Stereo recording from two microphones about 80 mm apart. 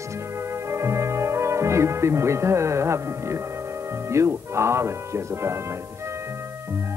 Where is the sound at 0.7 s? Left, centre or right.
Right.